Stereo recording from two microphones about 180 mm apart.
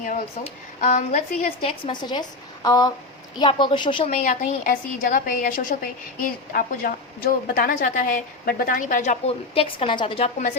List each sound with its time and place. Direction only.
0.0 s a woman's voice: 45° left (ahead or behind)
1.9 s a woman's voice: 25° left (ahead or behind)